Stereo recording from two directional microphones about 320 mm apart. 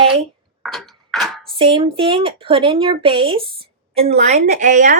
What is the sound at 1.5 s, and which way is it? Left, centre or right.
Speech, centre.